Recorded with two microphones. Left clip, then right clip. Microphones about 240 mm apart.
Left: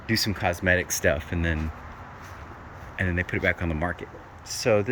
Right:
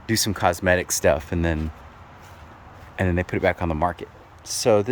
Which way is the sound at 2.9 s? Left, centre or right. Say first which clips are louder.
Right 3 dB; centre.